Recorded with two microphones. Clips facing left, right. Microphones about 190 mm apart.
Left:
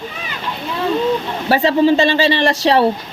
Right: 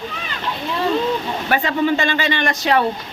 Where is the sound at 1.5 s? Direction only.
30° left (ahead or behind).